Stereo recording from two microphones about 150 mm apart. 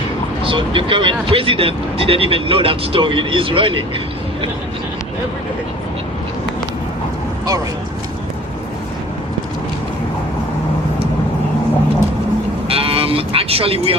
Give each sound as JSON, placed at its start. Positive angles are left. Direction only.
{"t": 0.4, "sound": "speech", "side_deg": -35}
{"t": 12.6, "sound": "cattle", "side_deg": -40}